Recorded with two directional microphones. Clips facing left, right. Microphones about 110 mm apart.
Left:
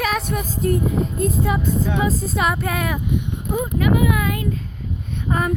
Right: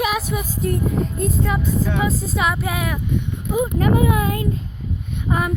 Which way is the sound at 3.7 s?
35° right (ahead or behind).